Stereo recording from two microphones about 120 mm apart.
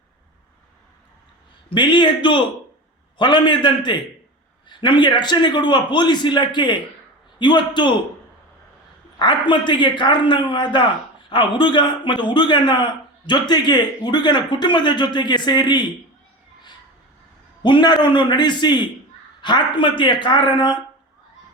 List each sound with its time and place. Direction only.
1.7 s speech: 40° left (ahead or behind)
9.1 s speech: 40° left (ahead or behind)
17.6 s speech: 40° left (ahead or behind)